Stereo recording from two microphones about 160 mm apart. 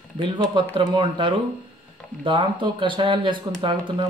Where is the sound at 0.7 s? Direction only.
30° right (ahead or behind).